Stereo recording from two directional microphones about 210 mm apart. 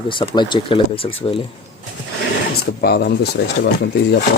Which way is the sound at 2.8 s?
50° left (ahead or behind).